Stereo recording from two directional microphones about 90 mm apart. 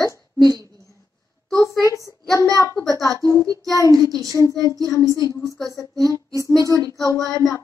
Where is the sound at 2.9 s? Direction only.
40° left (ahead or behind).